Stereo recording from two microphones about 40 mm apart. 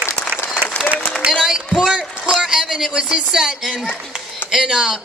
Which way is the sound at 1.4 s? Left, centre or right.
Centre.